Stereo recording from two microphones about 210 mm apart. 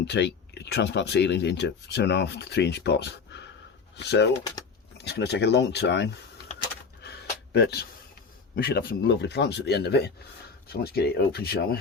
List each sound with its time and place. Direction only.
0.0 s speech: 55° left (ahead or behind)
7.0 s a sound: 50° left (ahead or behind)
8.5 s speech: 45° left (ahead or behind)